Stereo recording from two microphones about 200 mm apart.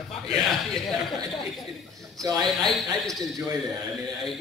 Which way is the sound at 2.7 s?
Centre (ahead or behind).